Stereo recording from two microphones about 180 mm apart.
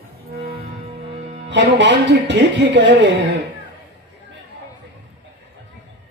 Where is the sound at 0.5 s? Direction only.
35° right (ahead or behind).